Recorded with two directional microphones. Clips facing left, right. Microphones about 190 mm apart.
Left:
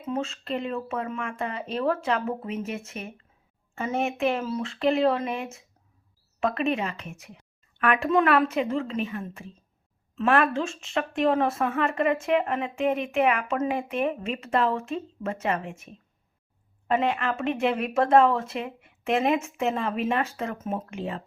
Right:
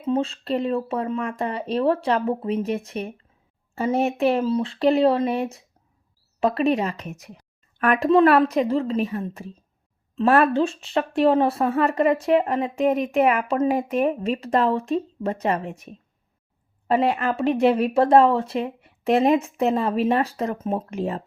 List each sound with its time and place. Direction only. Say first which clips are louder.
0.0 s speech: right 7 dB; 30° right (ahead or behind)